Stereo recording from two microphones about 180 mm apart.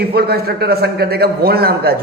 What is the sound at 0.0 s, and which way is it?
A man's voice, 60° right (ahead or behind).